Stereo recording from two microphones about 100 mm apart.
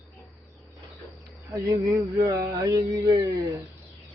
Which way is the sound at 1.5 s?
30° right (ahead or behind).